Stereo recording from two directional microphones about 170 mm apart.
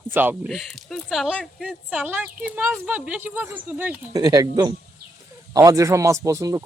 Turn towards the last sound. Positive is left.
turn(degrees=-20)  # may be behind; listen again after turning